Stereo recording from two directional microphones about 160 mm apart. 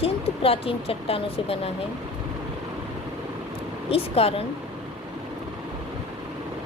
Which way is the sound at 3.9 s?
40° left (ahead or behind).